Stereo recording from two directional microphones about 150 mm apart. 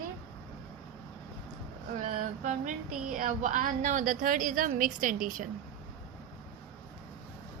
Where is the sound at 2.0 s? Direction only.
55° right (ahead or behind).